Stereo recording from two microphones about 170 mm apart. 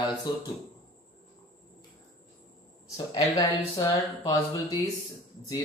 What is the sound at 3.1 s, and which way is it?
Speech, 20° left (ahead or behind).